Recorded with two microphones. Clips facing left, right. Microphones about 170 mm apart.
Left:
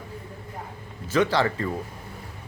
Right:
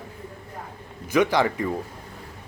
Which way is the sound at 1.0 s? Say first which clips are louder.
Right 2 dB; 15° right (ahead or behind).